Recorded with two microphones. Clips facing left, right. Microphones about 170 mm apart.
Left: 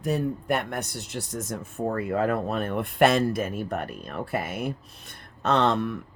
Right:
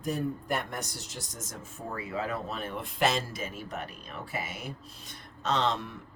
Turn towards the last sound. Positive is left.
turn(degrees=60)  # may be behind; listen again after turning